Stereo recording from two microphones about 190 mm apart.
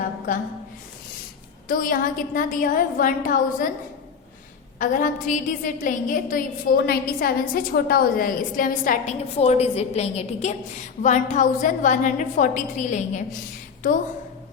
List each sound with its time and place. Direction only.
1.6 s a woman's voice: 45° left (ahead or behind)
4.8 s a woman's voice: 45° left (ahead or behind)